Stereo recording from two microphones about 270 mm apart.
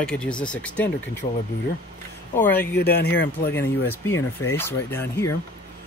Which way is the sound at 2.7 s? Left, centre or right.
Left.